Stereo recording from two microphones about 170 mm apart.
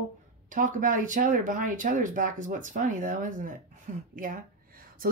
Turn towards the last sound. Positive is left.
turn(degrees=-60)  # may be behind; listen again after turning